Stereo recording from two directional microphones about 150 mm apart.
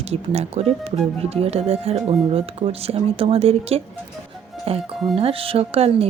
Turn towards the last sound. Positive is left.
turn(degrees=-40)  # may be behind; listen again after turning